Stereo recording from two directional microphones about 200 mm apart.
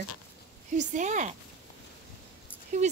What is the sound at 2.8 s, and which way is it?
Speech, 35° right (ahead or behind).